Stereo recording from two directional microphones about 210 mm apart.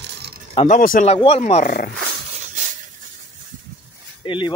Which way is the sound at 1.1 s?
25° left (ahead or behind).